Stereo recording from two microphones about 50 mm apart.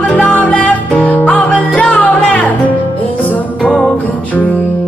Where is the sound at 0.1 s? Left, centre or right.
Left.